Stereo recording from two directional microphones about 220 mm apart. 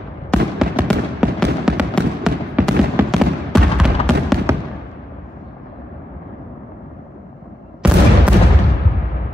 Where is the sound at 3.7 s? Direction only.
Centre (ahead or behind).